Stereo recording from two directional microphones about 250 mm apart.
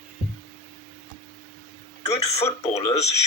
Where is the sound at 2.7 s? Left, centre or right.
Left.